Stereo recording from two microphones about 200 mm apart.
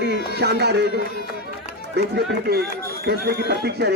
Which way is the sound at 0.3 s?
55° right (ahead or behind).